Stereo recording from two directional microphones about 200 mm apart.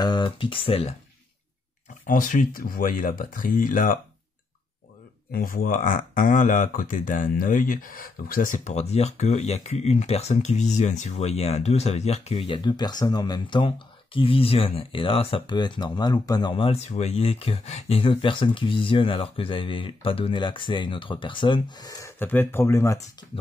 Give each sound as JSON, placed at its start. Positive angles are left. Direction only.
{"t": 0.0, "sound": "speech", "side_deg": 20}
{"t": 2.0, "sound": "speech", "side_deg": 40}
{"t": 5.3, "sound": "speech", "side_deg": 45}